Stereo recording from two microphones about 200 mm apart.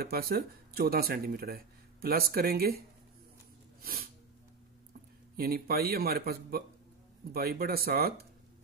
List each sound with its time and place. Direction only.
0.0 s speech: 50° right (ahead or behind)
3.8 s a sound: 45° right (ahead or behind)
5.3 s speech: 50° right (ahead or behind)